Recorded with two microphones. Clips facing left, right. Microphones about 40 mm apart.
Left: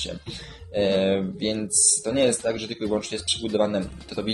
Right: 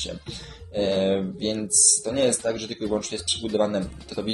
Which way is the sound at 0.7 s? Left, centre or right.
Centre.